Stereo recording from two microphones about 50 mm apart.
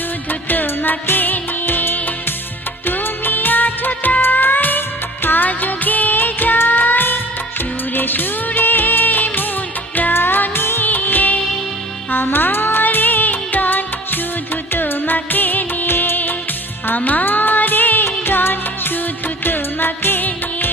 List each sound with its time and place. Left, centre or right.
0.3 s music: left
2.8 s music of bollywood: left
5.2 s music: left
7.6 s music of bollywood: left
10.2 s music: left
10.8 s music of bollywood: left
12.1 s music: left